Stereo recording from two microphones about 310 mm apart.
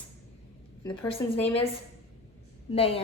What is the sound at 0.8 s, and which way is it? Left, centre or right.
Speech, centre.